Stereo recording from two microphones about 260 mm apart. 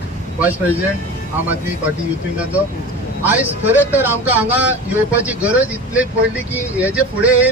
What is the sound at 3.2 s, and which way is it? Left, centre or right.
Speech, centre.